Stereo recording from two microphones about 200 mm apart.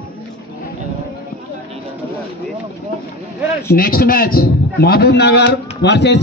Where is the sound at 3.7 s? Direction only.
45° left (ahead or behind).